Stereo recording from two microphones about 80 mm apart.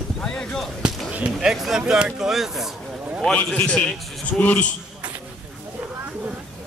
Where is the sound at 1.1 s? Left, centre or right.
Centre.